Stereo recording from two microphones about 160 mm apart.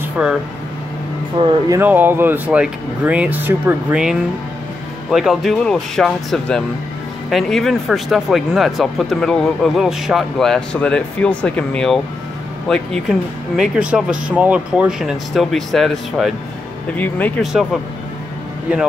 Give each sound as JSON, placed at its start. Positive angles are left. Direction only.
{"t": 0.2, "sound": "speech", "side_deg": -10}
{"t": 1.3, "sound": "speech", "side_deg": -30}
{"t": 1.8, "sound": "speech", "side_deg": -10}
{"t": 16.9, "sound": "speech", "side_deg": 10}
{"t": 17.4, "sound": "speech", "side_deg": -5}
{"t": 18.7, "sound": "speech", "side_deg": -5}